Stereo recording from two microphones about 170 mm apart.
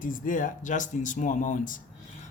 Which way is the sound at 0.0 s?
50° left (ahead or behind).